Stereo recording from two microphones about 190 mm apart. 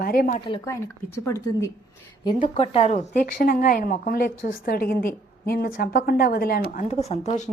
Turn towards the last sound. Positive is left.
turn(degrees=40)  # may be behind; listen again after turning